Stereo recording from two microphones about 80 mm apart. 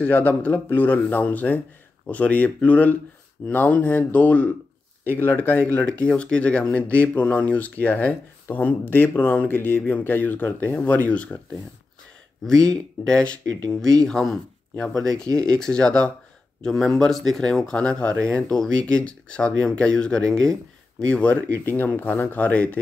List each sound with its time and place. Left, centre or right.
0.0 s speech: left
12.4 s speech: centre